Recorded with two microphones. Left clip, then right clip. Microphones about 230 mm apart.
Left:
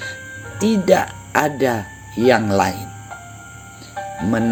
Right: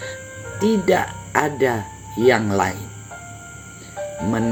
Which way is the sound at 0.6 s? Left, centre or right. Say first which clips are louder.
Left 2 dB; left.